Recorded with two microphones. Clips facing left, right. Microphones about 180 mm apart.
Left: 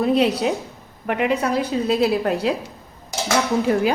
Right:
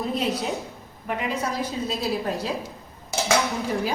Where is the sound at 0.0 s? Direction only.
70° left (ahead or behind).